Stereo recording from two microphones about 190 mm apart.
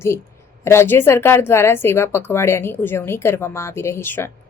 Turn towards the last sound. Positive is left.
turn(degrees=15)  # may be behind; listen again after turning